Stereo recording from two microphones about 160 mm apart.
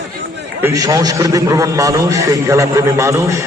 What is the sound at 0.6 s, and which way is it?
A man's voice, 20° right (ahead or behind).